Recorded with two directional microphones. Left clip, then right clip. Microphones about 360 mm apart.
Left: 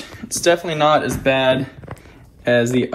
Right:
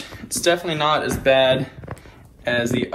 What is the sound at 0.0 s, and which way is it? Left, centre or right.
Speech, centre.